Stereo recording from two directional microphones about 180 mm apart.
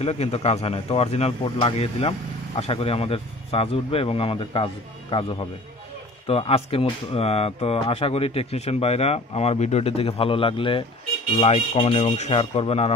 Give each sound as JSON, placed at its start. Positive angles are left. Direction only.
{"t": 0.0, "sound": "speech", "side_deg": 35}
{"t": 6.2, "sound": "speech", "side_deg": 30}